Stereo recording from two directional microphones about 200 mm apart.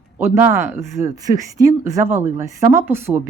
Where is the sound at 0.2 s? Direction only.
10° right (ahead or behind).